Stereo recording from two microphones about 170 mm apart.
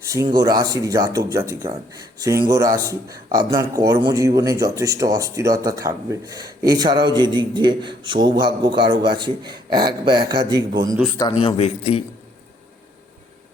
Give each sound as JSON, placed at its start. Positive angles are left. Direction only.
{"t": 0.0, "sound": "speech", "side_deg": -20}
{"t": 11.2, "sound": "speech", "side_deg": 30}